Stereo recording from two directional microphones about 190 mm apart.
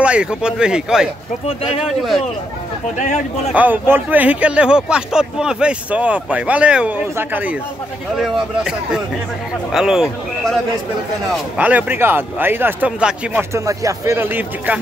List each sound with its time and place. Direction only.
0.0 s speech: 5° right (ahead or behind)
3.0 s speech: 40° left (ahead or behind)
3.5 s speech: 10° right (ahead or behind)